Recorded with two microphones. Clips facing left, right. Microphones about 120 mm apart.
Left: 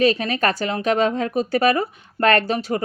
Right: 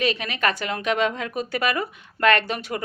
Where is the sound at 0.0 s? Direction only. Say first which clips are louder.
Left 5 dB; 35° left (ahead or behind).